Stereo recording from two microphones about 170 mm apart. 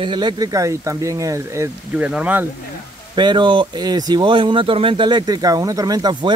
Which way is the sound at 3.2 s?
25° right (ahead or behind).